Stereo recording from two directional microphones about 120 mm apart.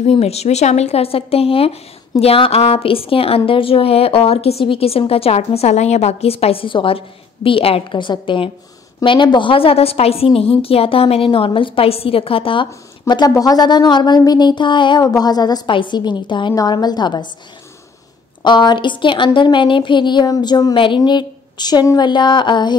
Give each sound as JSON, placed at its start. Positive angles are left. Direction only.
{"t": 0.0, "sound": "a woman's voice", "side_deg": 60}
{"t": 13.3, "sound": "speech", "side_deg": 30}
{"t": 18.4, "sound": "speech", "side_deg": 40}